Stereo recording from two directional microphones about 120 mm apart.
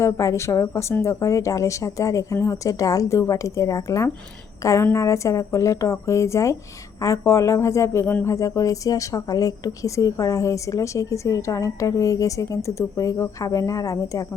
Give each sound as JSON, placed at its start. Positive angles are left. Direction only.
{"t": 0.0, "sound": "speech", "side_deg": 25}